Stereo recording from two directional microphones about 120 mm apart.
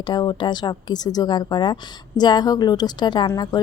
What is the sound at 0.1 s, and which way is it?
A woman's voice, 40° left (ahead or behind).